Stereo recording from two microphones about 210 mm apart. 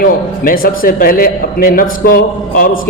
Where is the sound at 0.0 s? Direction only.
45° left (ahead or behind).